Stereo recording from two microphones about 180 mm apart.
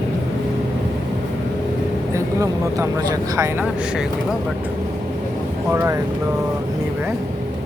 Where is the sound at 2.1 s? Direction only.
15° right (ahead or behind).